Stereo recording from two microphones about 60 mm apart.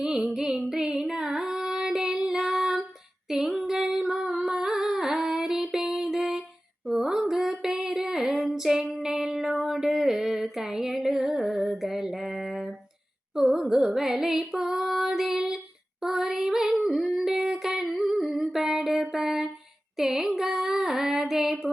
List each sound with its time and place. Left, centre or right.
0.0 s music: centre
3.2 s humming: centre
6.8 s a sound: centre
13.3 s music: centre
16.8 s humming: centre
19.1 s a sound: centre
20.0 s female singing: centre